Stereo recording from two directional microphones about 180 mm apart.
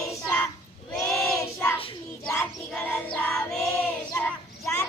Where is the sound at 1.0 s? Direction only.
5° left (ahead or behind).